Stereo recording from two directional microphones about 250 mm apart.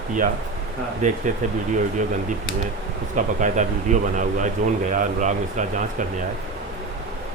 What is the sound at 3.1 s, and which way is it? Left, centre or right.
Speech, right.